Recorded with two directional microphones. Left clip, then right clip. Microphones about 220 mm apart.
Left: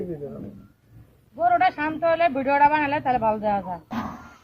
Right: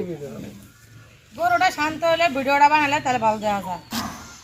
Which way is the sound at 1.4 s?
35° right (ahead or behind).